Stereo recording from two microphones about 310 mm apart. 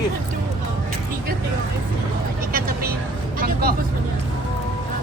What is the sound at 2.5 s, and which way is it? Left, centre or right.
Vehicle, right.